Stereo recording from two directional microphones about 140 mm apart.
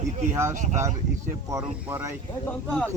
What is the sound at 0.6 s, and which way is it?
Speech, 60° right (ahead or behind).